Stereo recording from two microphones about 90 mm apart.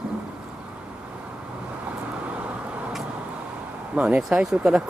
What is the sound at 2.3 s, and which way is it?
Vehicle, 15° right (ahead or behind).